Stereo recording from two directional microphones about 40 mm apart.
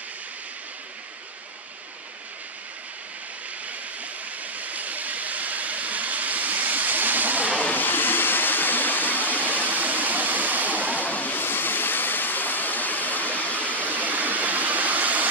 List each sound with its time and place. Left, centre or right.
4.6 s train: right
7.7 s vehicle: left
9.4 s waterfall: right
11.0 s vehicle: left
11.3 s waterfall: left
13.6 s waterfall: right